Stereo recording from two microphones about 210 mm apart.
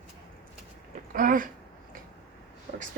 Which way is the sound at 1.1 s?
40° right (ahead or behind).